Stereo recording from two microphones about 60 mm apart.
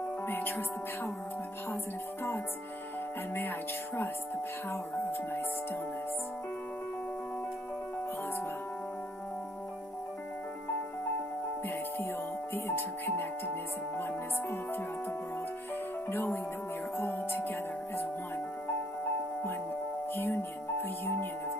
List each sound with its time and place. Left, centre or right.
0.3 s music: left
3.3 s music: left
12.5 s music: left
16.1 s music: left